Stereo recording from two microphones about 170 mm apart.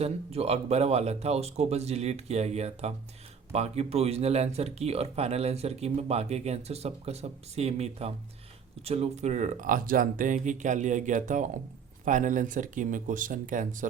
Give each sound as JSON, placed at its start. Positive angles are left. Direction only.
{"t": 0.0, "sound": "speech", "side_deg": -35}